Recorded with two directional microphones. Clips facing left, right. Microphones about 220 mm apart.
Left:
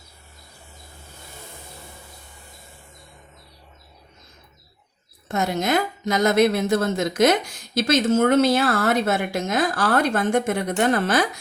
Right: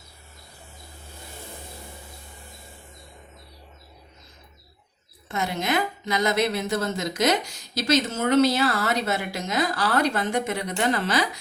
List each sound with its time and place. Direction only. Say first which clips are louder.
5.3 s a woman's voice: left 4 dB; 45° left (ahead or behind)